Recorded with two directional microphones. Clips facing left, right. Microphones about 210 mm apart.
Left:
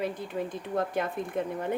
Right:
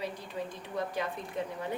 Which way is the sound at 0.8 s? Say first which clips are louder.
Left 4 dB; 55° left (ahead or behind).